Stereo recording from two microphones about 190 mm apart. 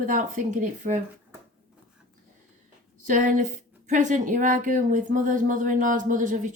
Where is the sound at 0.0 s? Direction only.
45° right (ahead or behind).